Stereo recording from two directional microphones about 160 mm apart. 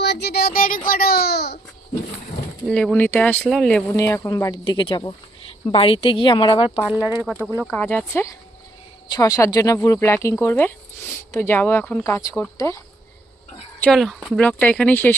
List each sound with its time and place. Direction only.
0.0 s a child's voice: 90° left
2.6 s speech: 5° left (ahead or behind)
3.9 s speech: 20° left (ahead or behind)
4.6 s speech: 30° left (ahead or behind)
6.9 s speech: 10° right (ahead or behind)
7.7 s speech: 10° left (ahead or behind)
13.8 s speech: centre (ahead or behind)